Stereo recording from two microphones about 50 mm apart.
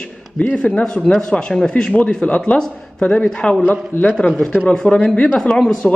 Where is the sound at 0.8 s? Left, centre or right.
Centre.